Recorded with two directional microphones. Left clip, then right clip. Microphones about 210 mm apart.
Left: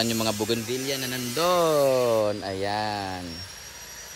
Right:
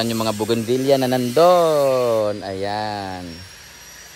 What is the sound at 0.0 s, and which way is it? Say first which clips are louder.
Speech: right 4 dB; 5° left (ahead or behind).